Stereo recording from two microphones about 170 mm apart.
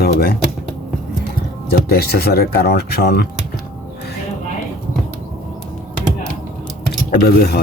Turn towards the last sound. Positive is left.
turn(degrees=65)  # may be behind; listen again after turning